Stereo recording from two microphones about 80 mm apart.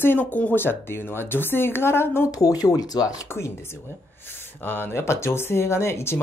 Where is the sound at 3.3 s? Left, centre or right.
Left.